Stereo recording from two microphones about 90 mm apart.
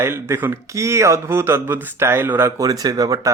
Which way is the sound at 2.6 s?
40° right (ahead or behind).